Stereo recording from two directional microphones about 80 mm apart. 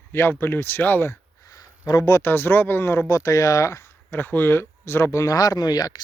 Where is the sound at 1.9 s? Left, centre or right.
Left.